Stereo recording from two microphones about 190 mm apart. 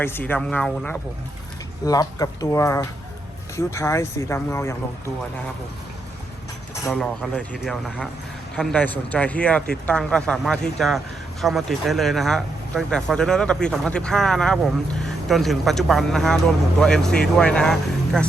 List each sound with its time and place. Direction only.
0.0 s speech: 10° left (ahead or behind)
1.8 s speech: 20° left (ahead or behind)
6.8 s speech: centre (ahead or behind)